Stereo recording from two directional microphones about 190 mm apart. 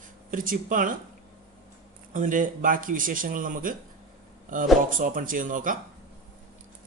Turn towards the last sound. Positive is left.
turn(degrees=-45)  # may be behind; listen again after turning